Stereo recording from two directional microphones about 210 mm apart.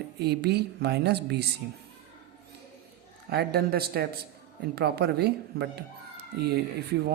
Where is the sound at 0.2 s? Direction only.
50° right (ahead or behind).